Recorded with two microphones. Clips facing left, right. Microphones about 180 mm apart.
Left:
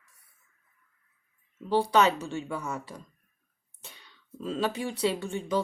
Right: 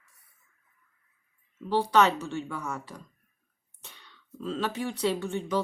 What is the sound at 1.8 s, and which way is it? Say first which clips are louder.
Speech: right 1 dB; 10° left (ahead or behind).